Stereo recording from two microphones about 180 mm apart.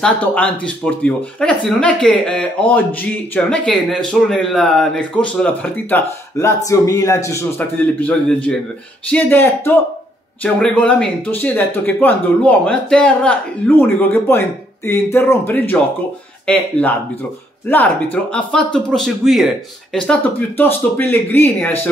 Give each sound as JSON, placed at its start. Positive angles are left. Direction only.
{"t": 0.0, "sound": "speech", "side_deg": 10}